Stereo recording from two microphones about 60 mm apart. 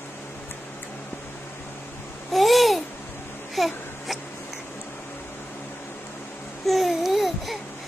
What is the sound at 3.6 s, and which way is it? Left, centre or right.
Baby cry, centre.